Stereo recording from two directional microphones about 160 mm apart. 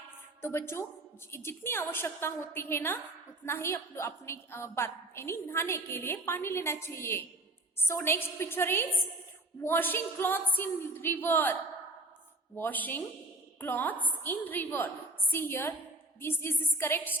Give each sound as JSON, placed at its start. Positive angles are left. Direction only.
{"t": 0.4, "sound": "a woman's voice", "side_deg": 15}
{"t": 12.5, "sound": "a woman's voice", "side_deg": 10}